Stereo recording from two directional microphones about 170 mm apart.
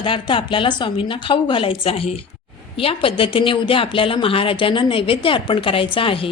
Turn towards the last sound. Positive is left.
turn(degrees=30)  # may be behind; listen again after turning